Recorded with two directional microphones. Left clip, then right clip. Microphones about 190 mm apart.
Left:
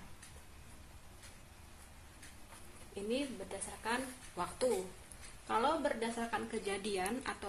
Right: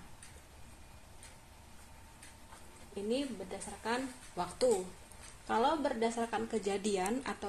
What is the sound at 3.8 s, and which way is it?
Speech, 35° right (ahead or behind).